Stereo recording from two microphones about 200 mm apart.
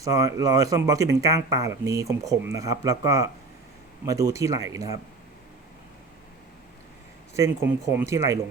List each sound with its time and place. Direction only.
0.0 s speech: 15° right (ahead or behind)
7.3 s speech: 15° right (ahead or behind)